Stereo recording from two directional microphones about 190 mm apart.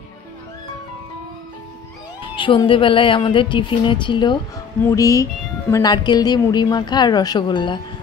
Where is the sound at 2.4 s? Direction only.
25° left (ahead or behind).